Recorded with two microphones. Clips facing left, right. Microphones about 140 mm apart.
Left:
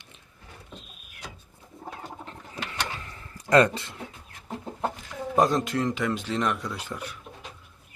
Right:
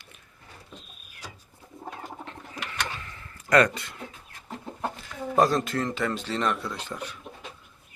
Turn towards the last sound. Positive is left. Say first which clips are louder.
# even
turn(degrees=10)  # may be behind; listen again after turning